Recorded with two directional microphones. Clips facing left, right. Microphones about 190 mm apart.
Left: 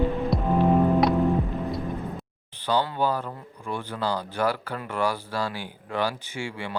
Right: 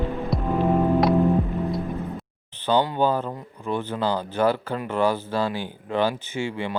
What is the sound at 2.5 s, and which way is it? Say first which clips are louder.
Speech: right 4 dB; 25° right (ahead or behind).